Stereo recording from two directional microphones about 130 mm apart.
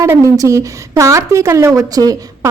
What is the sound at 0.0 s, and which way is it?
A woman's voice, 25° right (ahead or behind).